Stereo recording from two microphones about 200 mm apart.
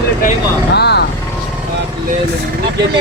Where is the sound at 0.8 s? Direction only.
55° left (ahead or behind).